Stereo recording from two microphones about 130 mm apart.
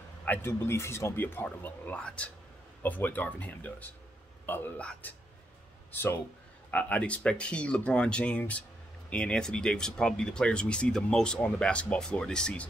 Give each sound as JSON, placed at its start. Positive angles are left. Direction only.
{"t": 0.2, "sound": "speech", "side_deg": 15}